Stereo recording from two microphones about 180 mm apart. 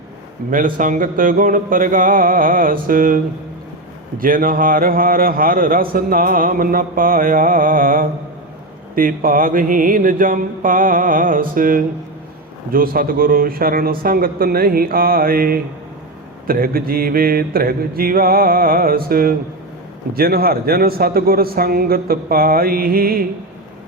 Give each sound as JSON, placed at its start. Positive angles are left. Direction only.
{"t": 0.5, "sound": "a man's voice", "side_deg": -50}
{"t": 4.2, "sound": "a man's voice", "side_deg": -50}